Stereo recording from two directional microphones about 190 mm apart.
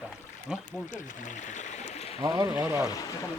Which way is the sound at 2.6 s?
10° right (ahead or behind).